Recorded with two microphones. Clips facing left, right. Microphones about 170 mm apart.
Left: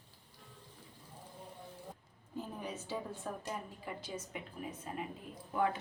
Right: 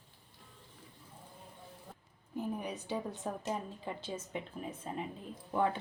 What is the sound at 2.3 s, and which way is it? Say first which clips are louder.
A woman's voice: right 4 dB; 15° right (ahead or behind).